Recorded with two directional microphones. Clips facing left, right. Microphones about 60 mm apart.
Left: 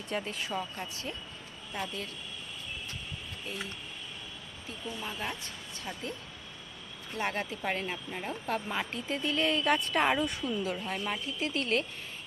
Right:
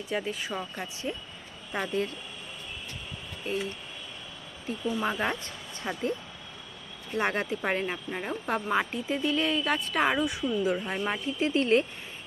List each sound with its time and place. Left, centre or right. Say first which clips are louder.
0.1 s speech: right 2 dB; centre
1.7 s speech: right 8 dB; right
5.0 s speech: right 8 dB; right
5.9 s speech: right 7 dB; right
7.2 s a woman's voice: right 5 dB; right; by 10.6 s centre
10.6 s speech: right 5 dB; right